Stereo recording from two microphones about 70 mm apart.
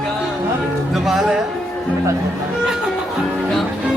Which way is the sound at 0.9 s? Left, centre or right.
Centre.